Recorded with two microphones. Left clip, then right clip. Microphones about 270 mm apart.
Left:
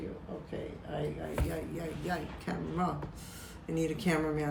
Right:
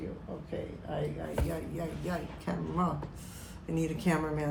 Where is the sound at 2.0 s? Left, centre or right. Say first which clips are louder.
Even; centre.